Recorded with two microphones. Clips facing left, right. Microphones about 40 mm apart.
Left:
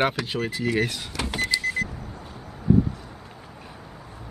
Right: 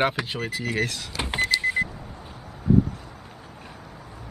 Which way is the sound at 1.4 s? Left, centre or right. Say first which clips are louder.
Right 3 dB; right.